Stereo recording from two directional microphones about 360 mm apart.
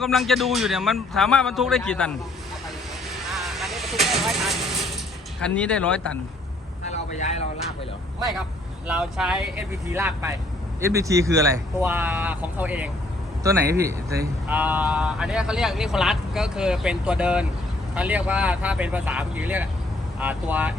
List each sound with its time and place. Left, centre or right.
0.0 s speech: centre
3.3 s vehicle: centre
5.4 s speech: centre
6.9 s speech: centre
8.9 s speech: centre